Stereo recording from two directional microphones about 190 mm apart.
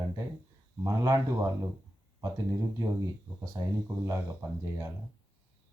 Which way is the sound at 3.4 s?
20° right (ahead or behind).